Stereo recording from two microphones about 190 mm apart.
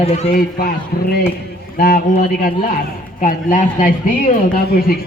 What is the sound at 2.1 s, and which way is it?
A man's voice, 40° left (ahead or behind).